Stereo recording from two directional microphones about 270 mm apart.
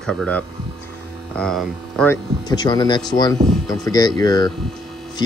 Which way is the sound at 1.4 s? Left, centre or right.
Centre.